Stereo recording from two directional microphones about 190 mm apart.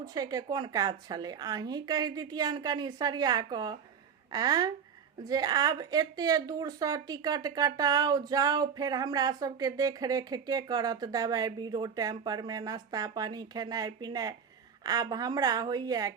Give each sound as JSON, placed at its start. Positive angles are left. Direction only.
{"t": 0.0, "sound": "speech", "side_deg": -20}